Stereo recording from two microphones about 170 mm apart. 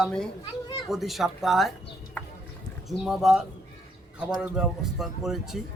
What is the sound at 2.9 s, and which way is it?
A man's voice, centre (ahead or behind).